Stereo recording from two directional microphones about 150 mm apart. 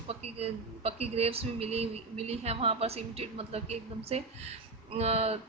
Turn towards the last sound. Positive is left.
turn(degrees=-45)  # may be behind; listen again after turning